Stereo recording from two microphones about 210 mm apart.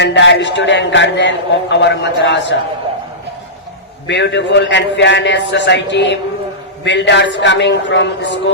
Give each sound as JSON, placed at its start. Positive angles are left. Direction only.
{"t": 0.0, "sound": "a man's voice", "side_deg": 60}
{"t": 4.0, "sound": "a man's voice", "side_deg": 55}